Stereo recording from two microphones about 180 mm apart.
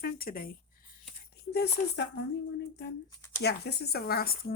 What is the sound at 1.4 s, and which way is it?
Speech, 65° left (ahead or behind).